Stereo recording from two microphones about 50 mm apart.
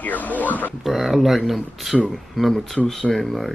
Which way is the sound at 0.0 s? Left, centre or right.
Left.